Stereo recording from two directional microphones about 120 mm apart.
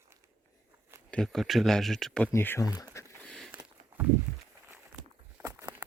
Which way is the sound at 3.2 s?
5° left (ahead or behind).